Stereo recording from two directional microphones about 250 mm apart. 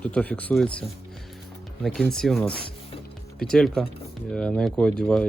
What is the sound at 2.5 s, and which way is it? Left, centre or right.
Music, left.